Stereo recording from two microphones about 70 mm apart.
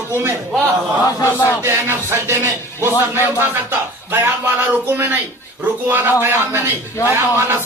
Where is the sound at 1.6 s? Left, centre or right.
Right.